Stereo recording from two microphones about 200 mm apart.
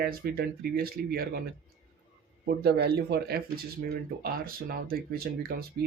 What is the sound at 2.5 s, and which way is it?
Speech, 50° right (ahead or behind).